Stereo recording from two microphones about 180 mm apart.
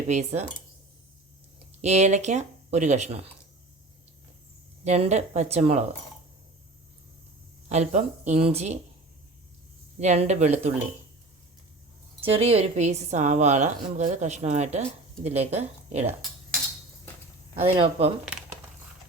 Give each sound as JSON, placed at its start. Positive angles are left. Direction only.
{"t": 0.1, "sound": "a woman's voice", "side_deg": -40}
{"t": 1.8, "sound": "a woman's voice", "side_deg": -40}
{"t": 4.9, "sound": "a woman's voice", "side_deg": -40}
{"t": 7.7, "sound": "a woman's voice", "side_deg": -40}
{"t": 10.0, "sound": "a woman's voice", "side_deg": -40}
{"t": 12.2, "sound": "a woman's voice", "side_deg": -30}
{"t": 17.5, "sound": "a woman's voice", "side_deg": -30}